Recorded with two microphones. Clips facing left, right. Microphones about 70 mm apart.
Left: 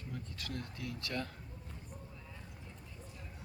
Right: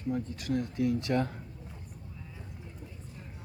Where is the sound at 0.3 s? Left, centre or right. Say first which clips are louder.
Right 13 dB; centre.